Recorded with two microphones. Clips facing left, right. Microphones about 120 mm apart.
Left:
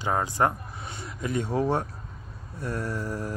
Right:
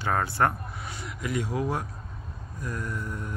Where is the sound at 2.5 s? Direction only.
30° left (ahead or behind).